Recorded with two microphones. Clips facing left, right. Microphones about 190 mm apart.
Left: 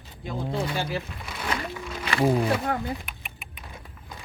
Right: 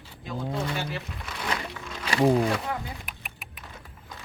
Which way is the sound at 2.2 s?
15° right (ahead or behind).